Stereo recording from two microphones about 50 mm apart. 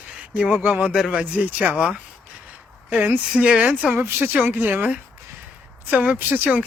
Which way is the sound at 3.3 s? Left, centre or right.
Right.